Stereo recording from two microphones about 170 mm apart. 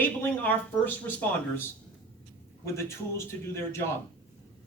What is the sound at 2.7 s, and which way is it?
Speech, 15° left (ahead or behind).